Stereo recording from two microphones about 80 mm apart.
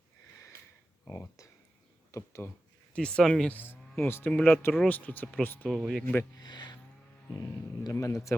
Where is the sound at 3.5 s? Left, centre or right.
Left.